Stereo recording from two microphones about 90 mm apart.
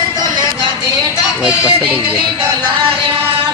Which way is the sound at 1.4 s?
10° right (ahead or behind).